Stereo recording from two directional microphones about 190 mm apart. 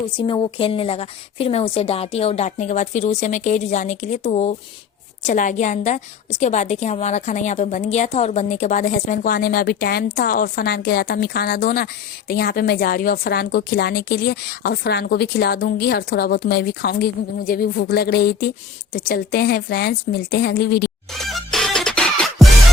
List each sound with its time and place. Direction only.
0.3 s a woman's voice: 30° left (ahead or behind); by 20.9 s 60° left (ahead or behind)
21.1 s music: centre (ahead or behind)